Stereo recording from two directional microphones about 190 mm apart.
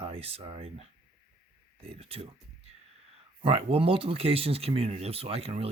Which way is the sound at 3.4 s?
30° right (ahead or behind).